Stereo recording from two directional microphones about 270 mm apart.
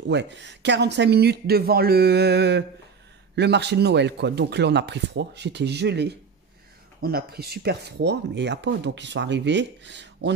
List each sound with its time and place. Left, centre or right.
0.1 s speech: right